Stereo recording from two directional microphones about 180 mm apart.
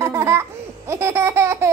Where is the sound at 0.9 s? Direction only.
15° right (ahead or behind).